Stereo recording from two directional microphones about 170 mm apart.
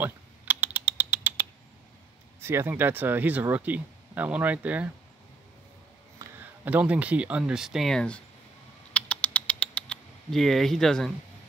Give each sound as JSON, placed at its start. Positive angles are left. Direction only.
{"t": 0.0, "sound": "typing", "side_deg": -10}
{"t": 2.4, "sound": "speech", "side_deg": -15}
{"t": 6.2, "sound": "a sound", "side_deg": -20}
{"t": 6.6, "sound": "speech", "side_deg": -10}
{"t": 8.9, "sound": "rodents", "side_deg": 10}